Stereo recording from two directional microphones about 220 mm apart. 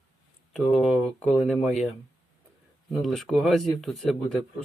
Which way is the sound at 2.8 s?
Centre (ahead or behind).